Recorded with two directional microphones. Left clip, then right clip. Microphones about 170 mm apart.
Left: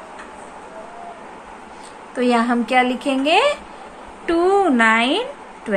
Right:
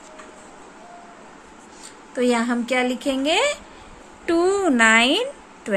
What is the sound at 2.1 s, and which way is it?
A woman's voice, 35° right (ahead or behind).